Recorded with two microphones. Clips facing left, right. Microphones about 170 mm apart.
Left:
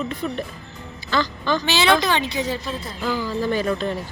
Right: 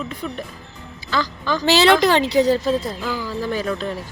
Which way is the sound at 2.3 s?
35° right (ahead or behind).